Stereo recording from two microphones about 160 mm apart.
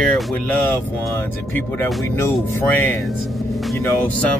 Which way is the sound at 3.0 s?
Centre (ahead or behind).